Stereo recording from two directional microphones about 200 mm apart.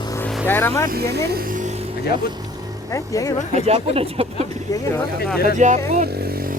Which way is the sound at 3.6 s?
30° right (ahead or behind).